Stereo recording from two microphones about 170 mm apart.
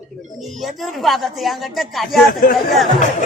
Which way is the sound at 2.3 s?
55° left (ahead or behind).